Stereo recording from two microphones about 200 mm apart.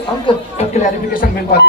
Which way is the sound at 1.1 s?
45° left (ahead or behind).